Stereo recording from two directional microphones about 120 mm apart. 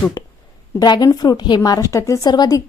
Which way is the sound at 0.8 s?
35° left (ahead or behind).